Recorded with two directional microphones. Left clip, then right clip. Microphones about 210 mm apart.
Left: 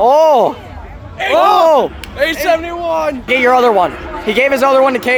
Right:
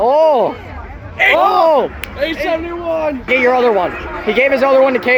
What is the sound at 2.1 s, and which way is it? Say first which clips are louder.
A man's voice: left 5 dB; 35° left (ahead or behind).